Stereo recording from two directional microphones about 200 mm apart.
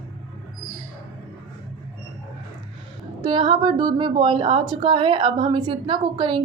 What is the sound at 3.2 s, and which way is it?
Speech, 25° right (ahead or behind).